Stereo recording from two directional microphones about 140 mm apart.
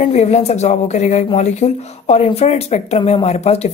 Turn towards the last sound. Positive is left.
turn(degrees=50)  # may be behind; listen again after turning